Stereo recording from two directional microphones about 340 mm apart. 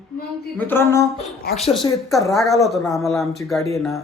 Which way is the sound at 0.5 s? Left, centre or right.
Centre.